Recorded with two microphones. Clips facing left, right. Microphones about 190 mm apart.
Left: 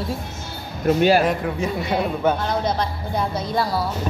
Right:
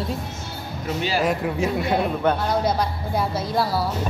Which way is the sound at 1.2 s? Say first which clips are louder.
Even; centre (ahead or behind).